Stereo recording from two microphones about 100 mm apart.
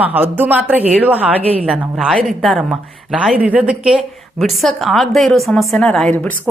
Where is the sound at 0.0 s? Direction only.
20° right (ahead or behind).